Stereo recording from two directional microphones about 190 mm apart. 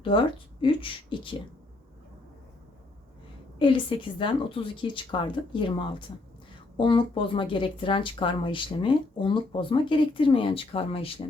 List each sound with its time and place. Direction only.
0.0 s speech: 25° left (ahead or behind)
3.6 s speech: 25° left (ahead or behind)